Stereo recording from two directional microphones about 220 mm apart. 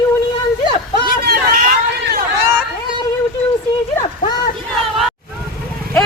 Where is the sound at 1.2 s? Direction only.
45° right (ahead or behind).